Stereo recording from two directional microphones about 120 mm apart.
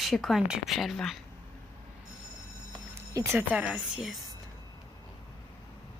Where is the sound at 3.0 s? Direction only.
25° right (ahead or behind).